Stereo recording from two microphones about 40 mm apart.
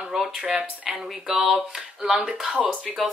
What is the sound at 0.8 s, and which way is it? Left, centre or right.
Speech, centre.